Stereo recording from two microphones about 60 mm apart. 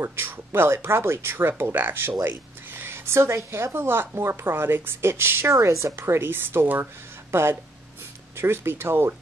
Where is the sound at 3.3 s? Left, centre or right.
Right.